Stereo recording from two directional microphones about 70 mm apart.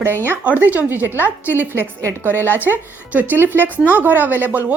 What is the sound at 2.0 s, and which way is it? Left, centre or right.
Speech, right.